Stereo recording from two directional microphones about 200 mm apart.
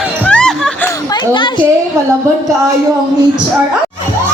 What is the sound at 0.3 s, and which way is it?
Music, 5° left (ahead or behind).